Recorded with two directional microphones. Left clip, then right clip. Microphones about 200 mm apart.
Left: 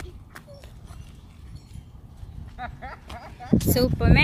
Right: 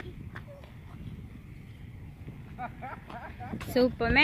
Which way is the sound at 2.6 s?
Centre (ahead or behind).